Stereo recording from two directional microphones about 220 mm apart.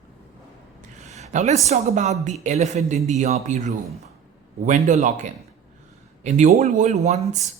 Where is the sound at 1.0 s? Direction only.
30° right (ahead or behind).